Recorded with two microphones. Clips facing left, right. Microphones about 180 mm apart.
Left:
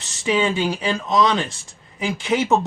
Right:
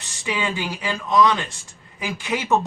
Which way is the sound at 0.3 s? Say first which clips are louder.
Left 6 dB; 25° left (ahead or behind).